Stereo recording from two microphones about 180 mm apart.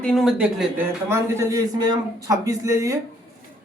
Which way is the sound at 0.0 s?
Centre (ahead or behind).